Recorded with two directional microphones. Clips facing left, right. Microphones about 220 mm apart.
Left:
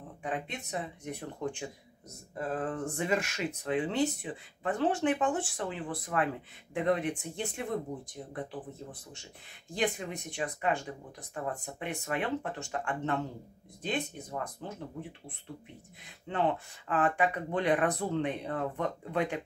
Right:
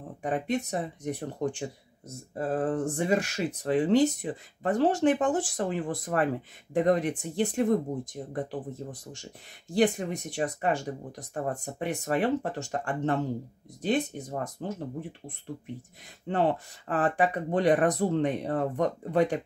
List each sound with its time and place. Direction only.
0.2 s speech: 40° right (ahead or behind)
9.8 s speech: 40° right (ahead or behind)